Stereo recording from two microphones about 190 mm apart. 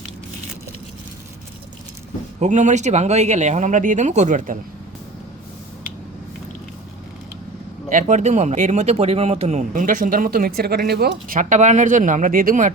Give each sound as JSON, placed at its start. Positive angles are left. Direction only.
{"t": 2.4, "sound": "speech", "side_deg": -40}
{"t": 7.9, "sound": "speech", "side_deg": -40}